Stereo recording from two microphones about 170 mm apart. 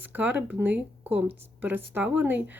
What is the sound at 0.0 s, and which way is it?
Speech, 10° right (ahead or behind).